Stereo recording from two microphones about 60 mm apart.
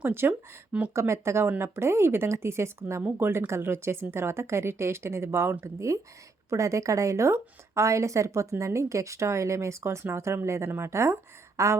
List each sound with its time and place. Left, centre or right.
0.0 s speech: right
6.5 s speech: right